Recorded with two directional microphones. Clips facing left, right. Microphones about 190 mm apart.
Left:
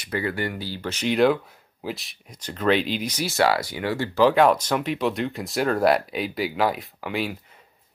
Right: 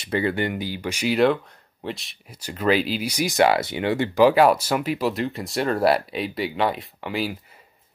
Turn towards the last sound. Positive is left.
turn(degrees=0)  # may be behind; listen again after turning